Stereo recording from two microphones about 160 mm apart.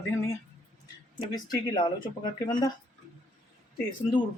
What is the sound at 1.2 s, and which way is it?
Speech, 30° left (ahead or behind).